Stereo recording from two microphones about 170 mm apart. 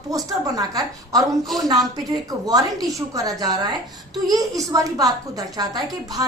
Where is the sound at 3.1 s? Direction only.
20° right (ahead or behind).